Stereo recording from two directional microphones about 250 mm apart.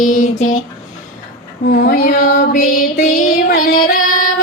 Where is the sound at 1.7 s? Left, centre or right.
Left.